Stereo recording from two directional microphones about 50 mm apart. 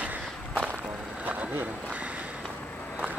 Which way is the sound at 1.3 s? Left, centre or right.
Right.